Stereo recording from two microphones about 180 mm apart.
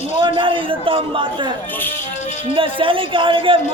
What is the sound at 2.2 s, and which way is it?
Music, 40° left (ahead or behind).